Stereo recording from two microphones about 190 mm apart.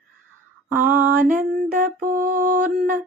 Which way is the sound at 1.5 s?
40° right (ahead or behind).